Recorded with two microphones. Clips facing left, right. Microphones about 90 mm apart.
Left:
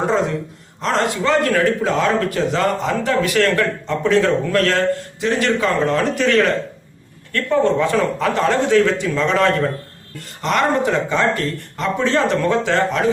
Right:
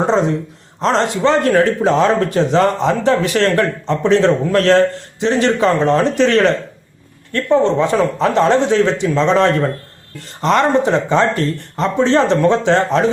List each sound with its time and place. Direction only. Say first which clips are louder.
0.8 s a man's voice: right 4 dB; 30° right (ahead or behind)